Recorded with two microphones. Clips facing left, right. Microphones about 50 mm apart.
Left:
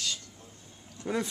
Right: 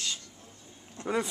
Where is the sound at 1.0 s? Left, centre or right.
Right.